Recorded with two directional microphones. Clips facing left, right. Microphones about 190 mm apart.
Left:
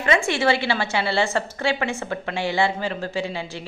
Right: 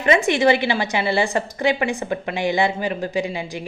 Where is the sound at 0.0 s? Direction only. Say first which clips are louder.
Right 4 dB; 20° right (ahead or behind).